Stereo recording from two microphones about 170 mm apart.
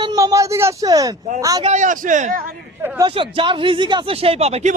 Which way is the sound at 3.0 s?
30° right (ahead or behind).